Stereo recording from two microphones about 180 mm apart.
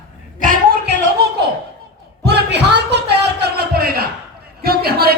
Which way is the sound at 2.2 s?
70° right (ahead or behind).